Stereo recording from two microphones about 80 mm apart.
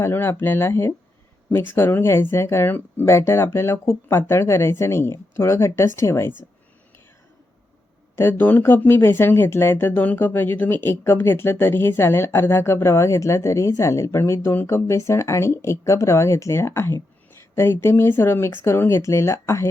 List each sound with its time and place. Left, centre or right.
0.0 s speech: left
8.1 s speech: left